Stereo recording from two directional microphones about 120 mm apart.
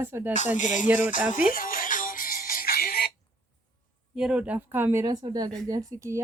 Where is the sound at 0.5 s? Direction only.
90° left.